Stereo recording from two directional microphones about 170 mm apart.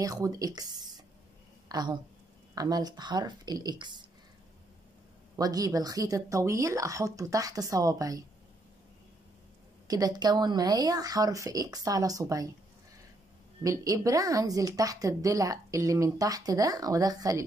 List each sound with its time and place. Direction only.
0.0 s a woman's voice: 20° right (ahead or behind)
5.3 s a woman's voice: 20° right (ahead or behind)
9.8 s a woman's voice: 20° right (ahead or behind)
13.6 s a woman's voice: 20° right (ahead or behind)